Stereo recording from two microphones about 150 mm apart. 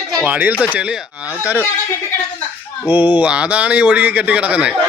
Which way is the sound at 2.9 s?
10° right (ahead or behind).